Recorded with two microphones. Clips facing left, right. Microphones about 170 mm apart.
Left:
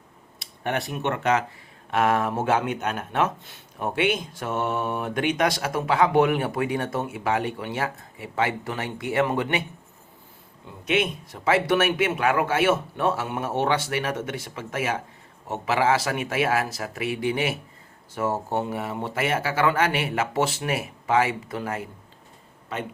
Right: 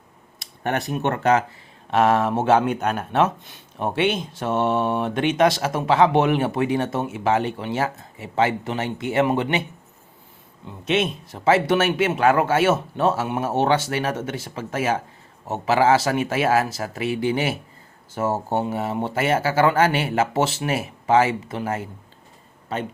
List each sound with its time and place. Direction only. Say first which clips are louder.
0.3 s speech: right 3 dB; 45° right (ahead or behind); by 9.6 s 25° right (ahead or behind)
10.8 s speech: right 2 dB; 30° right (ahead or behind)